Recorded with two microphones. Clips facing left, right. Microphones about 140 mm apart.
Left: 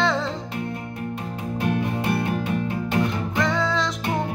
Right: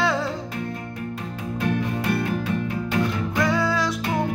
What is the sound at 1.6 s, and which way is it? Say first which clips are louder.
Music: even; 25° left (ahead or behind).